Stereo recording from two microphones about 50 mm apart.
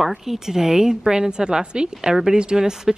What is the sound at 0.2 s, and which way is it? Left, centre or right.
A woman's voice, centre.